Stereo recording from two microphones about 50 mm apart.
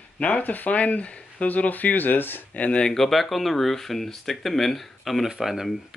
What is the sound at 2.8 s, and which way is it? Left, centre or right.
Speech, centre.